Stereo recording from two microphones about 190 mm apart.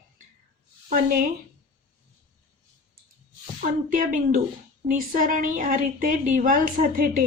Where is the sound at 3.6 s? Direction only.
45° right (ahead or behind).